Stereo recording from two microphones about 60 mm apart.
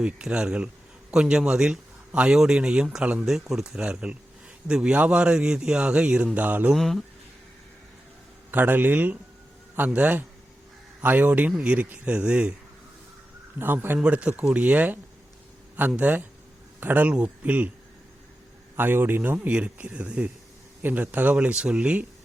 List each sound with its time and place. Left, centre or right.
0.0 s a man's voice: centre
3.8 s a man's voice: centre
6.3 s speech: right
6.7 s speech: centre
8.4 s a man's voice: right; by 12.5 s centre
13.6 s a man's voice: right
14.0 s speech: centre
16.0 s speech: right
18.8 s a man's voice: right
19.4 s speech: centre